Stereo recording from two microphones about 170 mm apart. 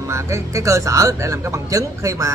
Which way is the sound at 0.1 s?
15° right (ahead or behind).